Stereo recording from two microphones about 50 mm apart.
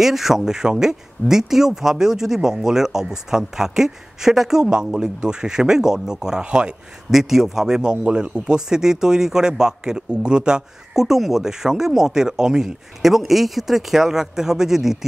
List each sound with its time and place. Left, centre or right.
0.0 s a man's voice: centre
6.4 s speech: right
7.1 s a man's voice: centre